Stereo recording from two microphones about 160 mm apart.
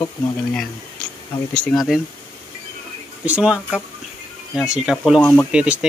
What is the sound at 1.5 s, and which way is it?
Speech, centre (ahead or behind).